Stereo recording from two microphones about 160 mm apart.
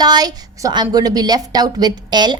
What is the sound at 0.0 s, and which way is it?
A woman's voice, 25° right (ahead or behind).